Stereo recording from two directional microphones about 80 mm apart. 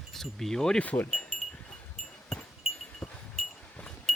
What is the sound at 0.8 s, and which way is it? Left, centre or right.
Speech, centre.